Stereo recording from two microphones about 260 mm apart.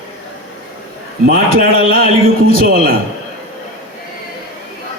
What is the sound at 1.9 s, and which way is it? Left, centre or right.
A man's voice, right.